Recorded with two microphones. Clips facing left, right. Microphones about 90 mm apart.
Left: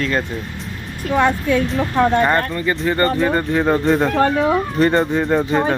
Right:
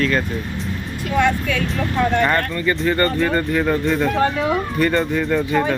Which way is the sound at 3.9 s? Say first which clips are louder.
Left 3 dB; 35° left (ahead or behind).